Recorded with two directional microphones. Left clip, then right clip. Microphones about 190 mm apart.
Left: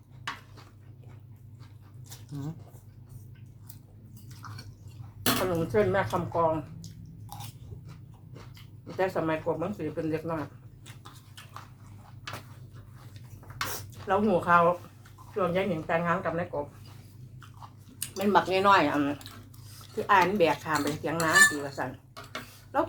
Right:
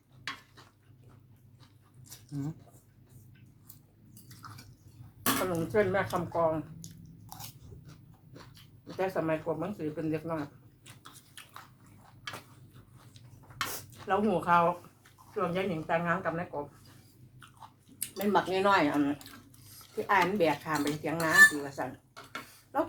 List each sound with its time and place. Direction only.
4.4 s drip: 20° right (ahead or behind)
5.2 s speech: 15° left (ahead or behind)
6.8 s a sound: 20° right (ahead or behind)
9.0 s speech: 15° left (ahead or behind)
14.1 s speech: 15° left (ahead or behind)
18.2 s speech: 20° left (ahead or behind)